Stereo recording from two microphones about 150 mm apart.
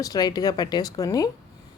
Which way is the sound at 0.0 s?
25° left (ahead or behind).